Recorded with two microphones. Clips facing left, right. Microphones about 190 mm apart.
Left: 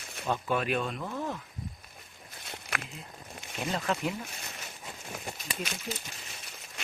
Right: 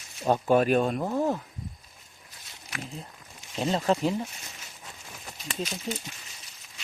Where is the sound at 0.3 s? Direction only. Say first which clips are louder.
Right 8 dB; 40° right (ahead or behind).